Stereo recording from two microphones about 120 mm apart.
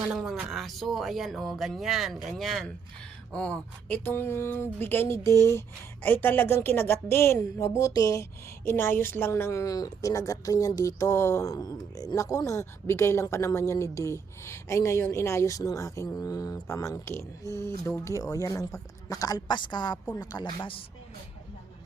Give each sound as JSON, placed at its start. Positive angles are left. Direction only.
{"t": 0.1, "sound": "a woman's voice", "side_deg": -5}